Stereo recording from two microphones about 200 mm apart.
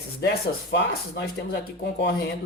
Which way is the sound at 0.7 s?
55° left (ahead or behind).